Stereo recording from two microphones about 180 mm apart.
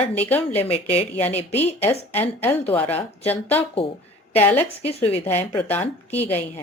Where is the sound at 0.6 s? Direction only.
35° left (ahead or behind).